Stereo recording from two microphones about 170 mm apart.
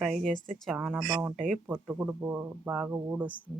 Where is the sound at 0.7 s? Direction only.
10° right (ahead or behind).